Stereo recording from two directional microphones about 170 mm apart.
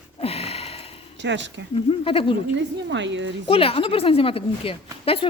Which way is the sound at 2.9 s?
90° right.